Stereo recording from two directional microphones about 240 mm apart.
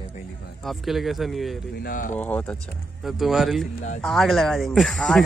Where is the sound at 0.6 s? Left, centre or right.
Centre.